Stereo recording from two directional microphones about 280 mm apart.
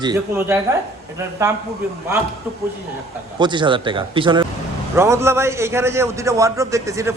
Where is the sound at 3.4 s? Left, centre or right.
Centre.